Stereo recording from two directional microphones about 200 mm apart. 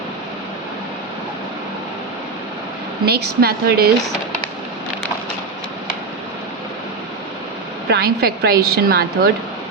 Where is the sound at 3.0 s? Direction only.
50° right (ahead or behind).